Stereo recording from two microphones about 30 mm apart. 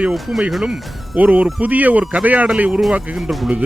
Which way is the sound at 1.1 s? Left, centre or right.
Right.